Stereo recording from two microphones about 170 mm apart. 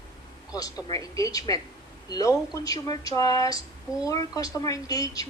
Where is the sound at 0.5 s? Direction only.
20° left (ahead or behind).